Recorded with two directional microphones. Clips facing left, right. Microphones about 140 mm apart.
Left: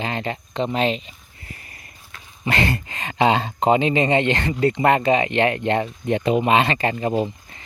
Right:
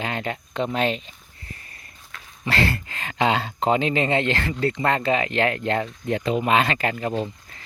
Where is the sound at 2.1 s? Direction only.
5° left (ahead or behind).